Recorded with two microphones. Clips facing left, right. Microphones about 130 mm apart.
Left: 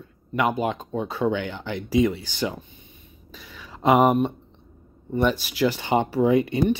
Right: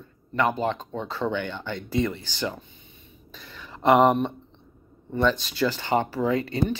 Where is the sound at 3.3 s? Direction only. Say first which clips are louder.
Left 1 dB; 5° left (ahead or behind).